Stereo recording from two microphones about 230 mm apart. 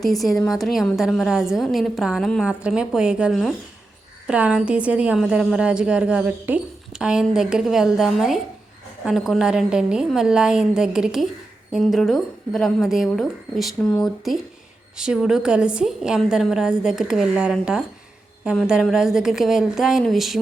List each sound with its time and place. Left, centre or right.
0.0 s a woman's voice: centre